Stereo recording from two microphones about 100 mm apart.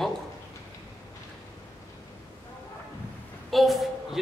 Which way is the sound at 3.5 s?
Centre (ahead or behind).